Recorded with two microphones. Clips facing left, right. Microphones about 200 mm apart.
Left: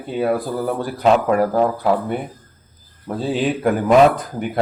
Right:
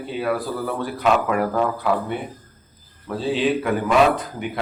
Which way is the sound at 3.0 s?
45° left (ahead or behind).